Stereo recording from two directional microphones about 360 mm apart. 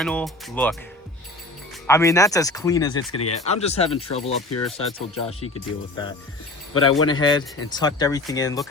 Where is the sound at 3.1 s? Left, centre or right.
Left.